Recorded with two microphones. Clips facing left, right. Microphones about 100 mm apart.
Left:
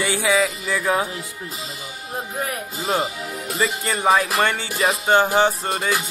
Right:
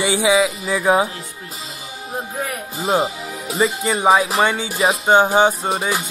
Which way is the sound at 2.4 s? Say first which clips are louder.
Right 2 dB; centre (ahead or behind).